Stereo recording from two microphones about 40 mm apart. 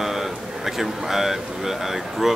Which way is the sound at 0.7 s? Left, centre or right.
Centre.